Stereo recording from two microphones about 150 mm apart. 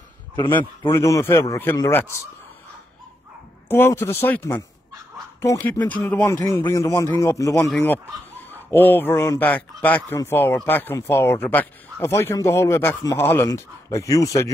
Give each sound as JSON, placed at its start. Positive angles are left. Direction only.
{"t": 0.8, "sound": "speech", "side_deg": 20}
{"t": 3.6, "sound": "speech", "side_deg": 15}